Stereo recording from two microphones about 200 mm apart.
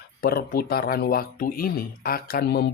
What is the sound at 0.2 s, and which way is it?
Speech, 50° left (ahead or behind).